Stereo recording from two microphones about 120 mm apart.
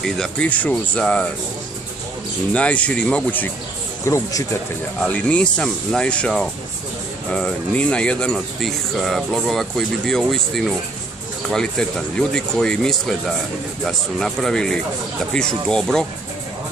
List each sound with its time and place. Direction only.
0.0 s speech: 5° left (ahead or behind)
2.5 s speech: 10° left (ahead or behind)
4.0 s speech: 25° left (ahead or behind)
5.0 s speech: 10° left (ahead or behind)
12.2 s speech: 5° left (ahead or behind)